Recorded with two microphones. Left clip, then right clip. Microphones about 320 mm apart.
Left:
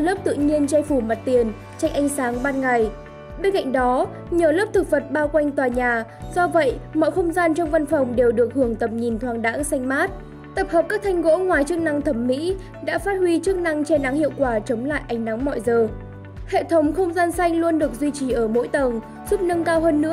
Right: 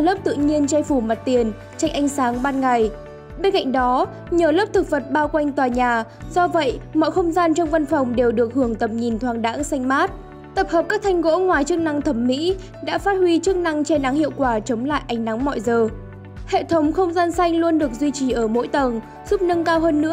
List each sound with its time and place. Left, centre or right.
0.0 s speech: centre